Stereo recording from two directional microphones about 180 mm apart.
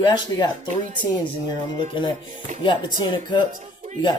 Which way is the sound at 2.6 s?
25° left (ahead or behind).